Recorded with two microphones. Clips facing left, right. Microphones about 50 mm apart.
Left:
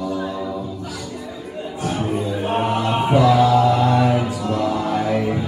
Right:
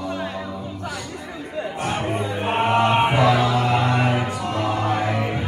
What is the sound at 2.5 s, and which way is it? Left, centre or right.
Mantra, right.